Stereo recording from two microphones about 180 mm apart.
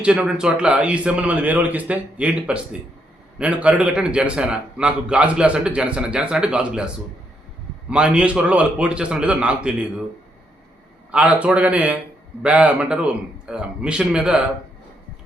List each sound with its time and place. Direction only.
0.0 s a man's voice: 5° right (ahead or behind)
11.1 s a man's voice: 5° right (ahead or behind)